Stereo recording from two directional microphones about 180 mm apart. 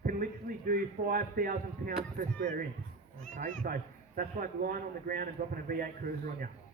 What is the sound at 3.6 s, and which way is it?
A man's voice, 50° right (ahead or behind).